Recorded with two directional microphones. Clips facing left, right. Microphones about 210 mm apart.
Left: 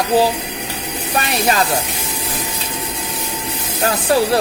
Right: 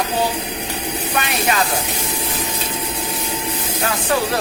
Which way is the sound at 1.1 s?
35° left (ahead or behind).